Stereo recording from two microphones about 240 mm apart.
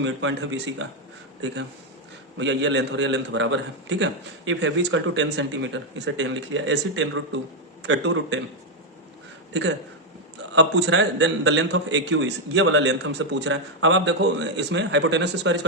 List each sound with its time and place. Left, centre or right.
0.0 s a man's voice: right
2.4 s a man's voice: right
9.5 s a man's voice: right